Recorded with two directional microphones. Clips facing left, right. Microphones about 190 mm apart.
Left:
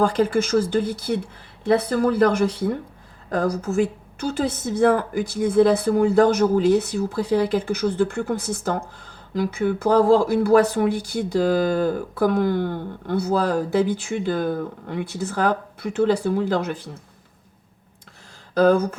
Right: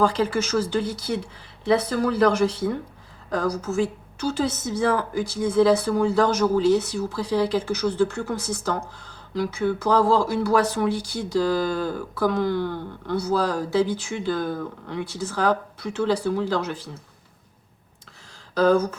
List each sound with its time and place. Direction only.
0.0 s a woman's voice: 50° left (ahead or behind)
18.5 s speech: 55° left (ahead or behind)